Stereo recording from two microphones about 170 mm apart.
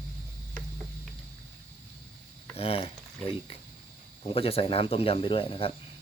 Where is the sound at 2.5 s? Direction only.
35° left (ahead or behind).